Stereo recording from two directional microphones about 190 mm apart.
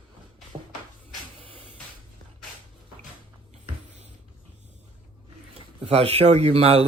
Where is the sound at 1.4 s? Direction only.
30° right (ahead or behind).